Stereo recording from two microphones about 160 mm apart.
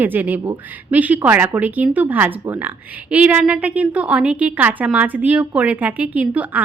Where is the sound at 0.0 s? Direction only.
10° right (ahead or behind).